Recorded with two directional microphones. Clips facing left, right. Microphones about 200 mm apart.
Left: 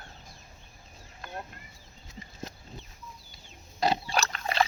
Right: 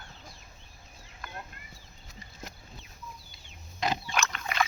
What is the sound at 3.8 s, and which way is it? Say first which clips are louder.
Pig: left 3 dB; 35° left (ahead or behind).